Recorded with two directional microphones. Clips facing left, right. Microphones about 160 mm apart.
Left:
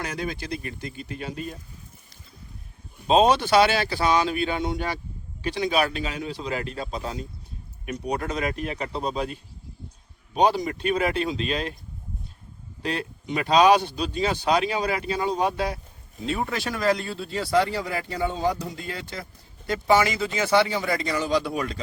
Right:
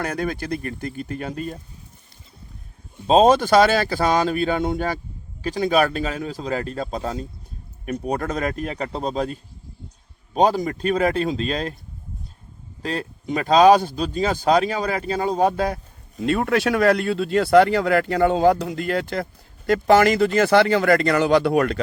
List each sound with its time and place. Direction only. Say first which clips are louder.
0.0 s speech: right 5 dB; 55° right (ahead or behind)
3.1 s speech: right 4 dB; 45° right (ahead or behind)
12.8 s speech: right 2 dB; 40° right (ahead or behind)
16.2 s speech: right 8 dB; 65° right (ahead or behind)